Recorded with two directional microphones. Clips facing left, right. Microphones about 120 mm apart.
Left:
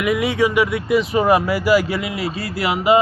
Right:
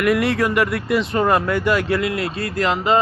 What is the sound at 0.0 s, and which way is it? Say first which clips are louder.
A man's voice: even; centre (ahead or behind).